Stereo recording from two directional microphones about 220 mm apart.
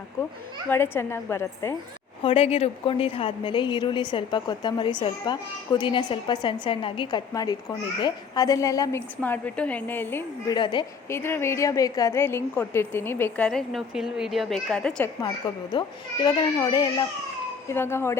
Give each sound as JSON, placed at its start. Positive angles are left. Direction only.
{"t": 0.2, "sound": "a woman's voice", "side_deg": 15}
{"t": 2.2, "sound": "a woman's voice", "side_deg": 25}
{"t": 10.6, "sound": "a woman's voice", "side_deg": 20}
{"t": 11.2, "sound": "a woman's voice", "side_deg": 10}
{"t": 15.7, "sound": "a woman's voice", "side_deg": 20}